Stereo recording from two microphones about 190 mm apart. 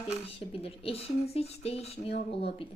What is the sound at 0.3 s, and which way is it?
A woman's voice, 30° left (ahead or behind).